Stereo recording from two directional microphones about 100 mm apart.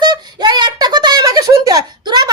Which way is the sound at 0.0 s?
45° right (ahead or behind).